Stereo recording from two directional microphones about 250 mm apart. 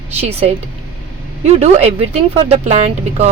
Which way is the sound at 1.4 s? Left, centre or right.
Right.